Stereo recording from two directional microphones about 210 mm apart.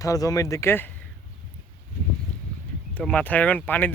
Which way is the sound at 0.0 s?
15° left (ahead or behind).